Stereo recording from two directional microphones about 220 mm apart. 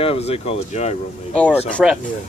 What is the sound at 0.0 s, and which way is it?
Speech, 25° left (ahead or behind).